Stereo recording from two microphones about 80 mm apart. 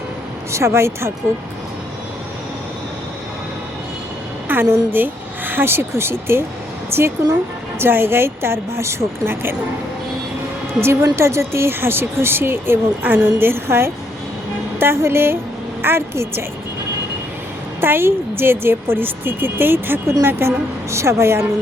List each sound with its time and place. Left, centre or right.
0.5 s a woman's voice: right
4.4 s a woman's voice: right
10.8 s a woman's voice: right
17.7 s a woman's voice: right